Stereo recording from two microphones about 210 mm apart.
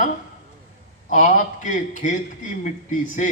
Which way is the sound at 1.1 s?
40° left (ahead or behind).